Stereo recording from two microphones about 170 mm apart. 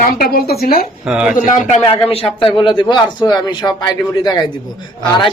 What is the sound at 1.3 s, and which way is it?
Speech, 50° left (ahead or behind).